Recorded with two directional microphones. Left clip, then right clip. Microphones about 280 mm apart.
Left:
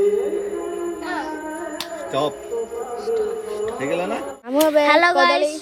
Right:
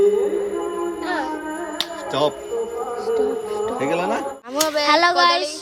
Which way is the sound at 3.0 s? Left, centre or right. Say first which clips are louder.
Right 2 dB; right.